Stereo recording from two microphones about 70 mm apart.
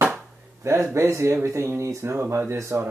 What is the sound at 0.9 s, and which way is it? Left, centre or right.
Speech, right.